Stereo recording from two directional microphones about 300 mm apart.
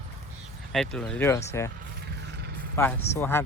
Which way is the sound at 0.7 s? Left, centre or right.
Centre.